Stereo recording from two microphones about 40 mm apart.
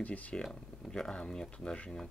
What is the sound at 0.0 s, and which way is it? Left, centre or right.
Speech, left.